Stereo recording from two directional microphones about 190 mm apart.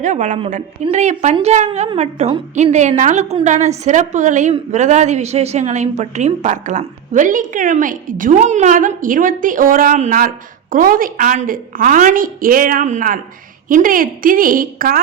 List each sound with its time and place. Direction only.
0.0 s a woman's voice: 40° right (ahead or behind)